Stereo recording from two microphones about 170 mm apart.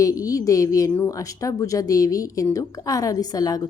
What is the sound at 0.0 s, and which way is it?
A woman's voice, 20° left (ahead or behind).